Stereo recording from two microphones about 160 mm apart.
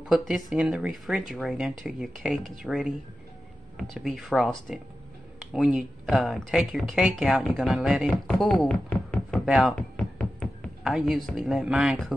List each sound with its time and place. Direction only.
0.0 s speech: centre (ahead or behind)